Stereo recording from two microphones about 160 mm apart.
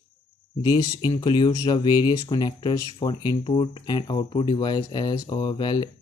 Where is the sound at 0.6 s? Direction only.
30° left (ahead or behind).